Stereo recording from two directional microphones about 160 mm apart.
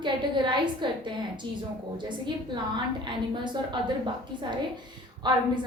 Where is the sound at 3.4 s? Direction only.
30° right (ahead or behind).